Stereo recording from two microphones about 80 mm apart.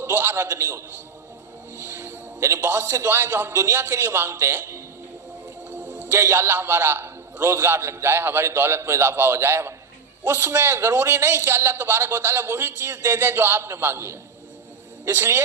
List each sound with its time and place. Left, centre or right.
0.0 s a man's voice: right
1.9 s a man's voice: right
5.6 s a man's voice: centre